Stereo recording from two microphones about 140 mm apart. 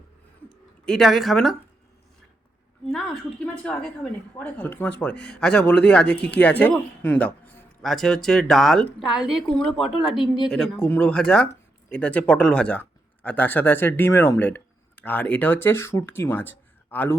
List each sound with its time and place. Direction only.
0.4 s speech: 5° left (ahead or behind)
2.9 s a woman's voice: 5° left (ahead or behind)